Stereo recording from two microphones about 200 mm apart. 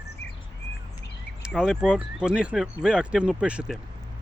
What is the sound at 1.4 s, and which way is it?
Speech, 5° right (ahead or behind).